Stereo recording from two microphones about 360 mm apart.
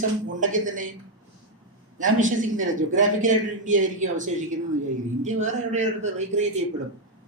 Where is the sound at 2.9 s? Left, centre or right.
Right.